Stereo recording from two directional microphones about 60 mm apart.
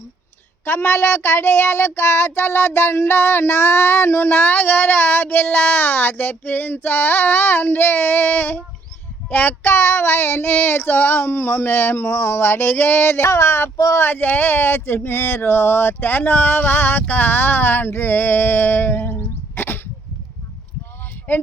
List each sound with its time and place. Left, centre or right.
0.6 s child singing: left
13.7 s speech: left
14.0 s child singing: left
21.3 s child singing: left